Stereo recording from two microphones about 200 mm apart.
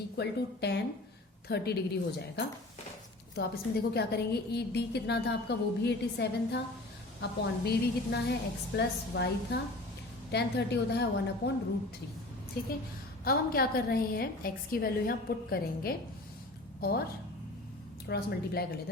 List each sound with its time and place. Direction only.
0.2 s a woman's voice: 55° left (ahead or behind)
12.6 s a woman's voice: 50° left (ahead or behind)
18.1 s a woman's voice: 50° left (ahead or behind)